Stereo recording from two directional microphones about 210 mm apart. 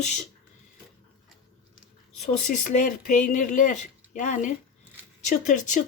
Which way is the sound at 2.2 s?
35° left (ahead or behind).